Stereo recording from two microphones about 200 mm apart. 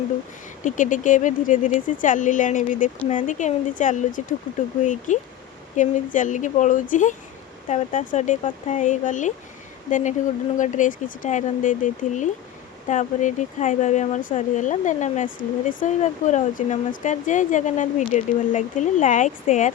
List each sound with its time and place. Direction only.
0.6 s speech: 40° left (ahead or behind)